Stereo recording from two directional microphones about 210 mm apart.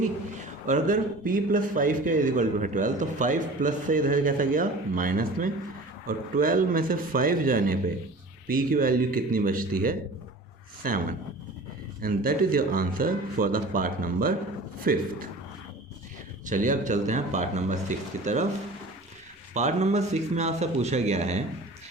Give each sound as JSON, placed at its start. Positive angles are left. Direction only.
{"t": 0.3, "sound": "a man's voice", "side_deg": -40}
{"t": 12.0, "sound": "speech", "side_deg": -45}
{"t": 16.5, "sound": "a man's voice", "side_deg": -35}
{"t": 19.5, "sound": "a man's voice", "side_deg": -35}